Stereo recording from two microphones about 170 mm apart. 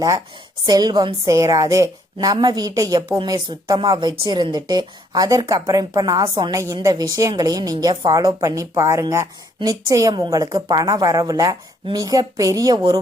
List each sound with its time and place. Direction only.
0.6 s a woman's voice: 25° right (ahead or behind)